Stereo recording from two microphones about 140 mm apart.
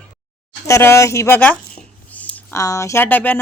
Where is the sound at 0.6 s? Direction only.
20° left (ahead or behind).